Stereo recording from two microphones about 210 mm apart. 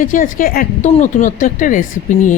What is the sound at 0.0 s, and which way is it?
Speech, 40° left (ahead or behind).